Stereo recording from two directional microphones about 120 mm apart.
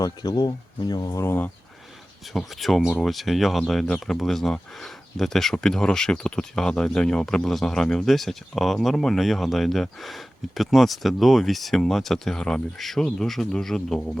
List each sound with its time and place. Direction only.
0.0 s speech: 35° left (ahead or behind)
2.3 s speech: centre (ahead or behind)